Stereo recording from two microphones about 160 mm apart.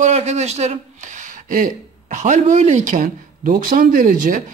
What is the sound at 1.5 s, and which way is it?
Speech, 55° right (ahead or behind).